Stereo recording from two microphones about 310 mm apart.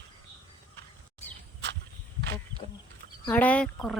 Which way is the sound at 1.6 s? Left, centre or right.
Right.